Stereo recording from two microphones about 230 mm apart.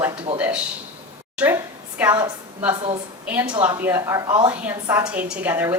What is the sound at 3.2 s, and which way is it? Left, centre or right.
A woman's voice, centre.